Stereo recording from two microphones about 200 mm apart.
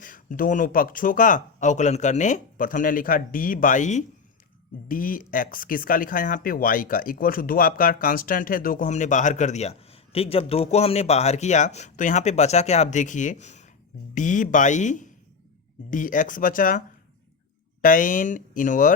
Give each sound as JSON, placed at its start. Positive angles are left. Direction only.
{"t": 0.0, "sound": "speech", "side_deg": 45}
{"t": 17.8, "sound": "speech", "side_deg": 40}